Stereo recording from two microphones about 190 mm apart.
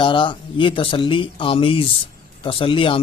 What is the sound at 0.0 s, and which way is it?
Speech, 25° left (ahead or behind).